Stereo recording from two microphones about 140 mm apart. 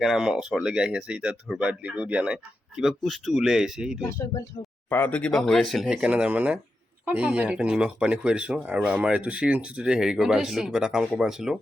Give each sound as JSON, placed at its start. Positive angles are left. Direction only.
{"t": 0.0, "sound": "speech", "side_deg": -5}
{"t": 4.2, "sound": "speech", "side_deg": 20}